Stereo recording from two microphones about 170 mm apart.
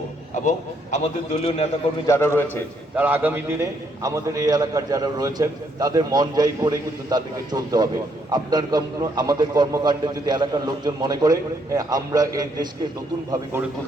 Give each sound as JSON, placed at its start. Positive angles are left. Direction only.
{"t": 0.4, "sound": "a man's voice", "side_deg": 40}
{"t": 2.0, "sound": "a man's voice", "side_deg": 15}
{"t": 2.9, "sound": "a man's voice", "side_deg": -10}